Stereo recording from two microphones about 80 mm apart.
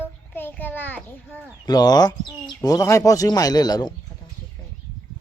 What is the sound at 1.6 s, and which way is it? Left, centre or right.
Speech, left.